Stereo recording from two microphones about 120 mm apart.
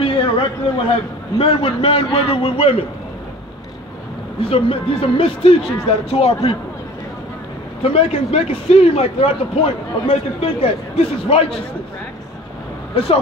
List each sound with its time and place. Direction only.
0.0 s a sound: 50° left (ahead or behind)
1.4 s a man's voice: 50° left (ahead or behind)
4.4 s a man's voice: 50° left (ahead or behind)
7.8 s a man's voice: 55° left (ahead or behind)
12.9 s a man's voice: 50° left (ahead or behind)